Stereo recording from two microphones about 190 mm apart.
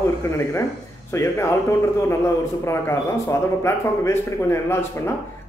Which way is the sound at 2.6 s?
15° left (ahead or behind).